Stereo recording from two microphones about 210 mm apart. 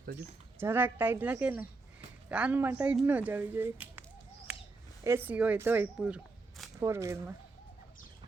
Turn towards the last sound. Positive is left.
turn(degrees=-15)  # may be behind; listen again after turning